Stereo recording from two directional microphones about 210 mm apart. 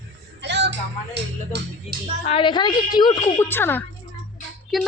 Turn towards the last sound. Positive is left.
turn(degrees=0)  # may be behind; listen again after turning